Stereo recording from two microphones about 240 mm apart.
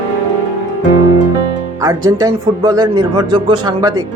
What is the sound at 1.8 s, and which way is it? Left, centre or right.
Speech, centre.